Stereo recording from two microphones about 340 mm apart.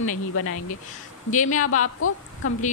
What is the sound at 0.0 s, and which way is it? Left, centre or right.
Speech, left.